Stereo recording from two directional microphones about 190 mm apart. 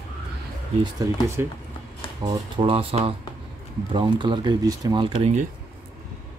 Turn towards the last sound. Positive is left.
turn(degrees=-35)  # may be behind; listen again after turning